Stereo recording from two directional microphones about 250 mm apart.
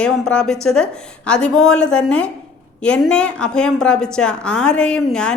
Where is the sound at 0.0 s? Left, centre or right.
Centre.